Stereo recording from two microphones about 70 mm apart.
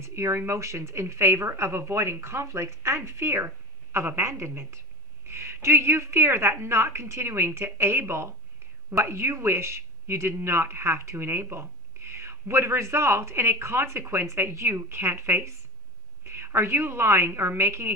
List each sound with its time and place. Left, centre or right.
0.0 s speech: right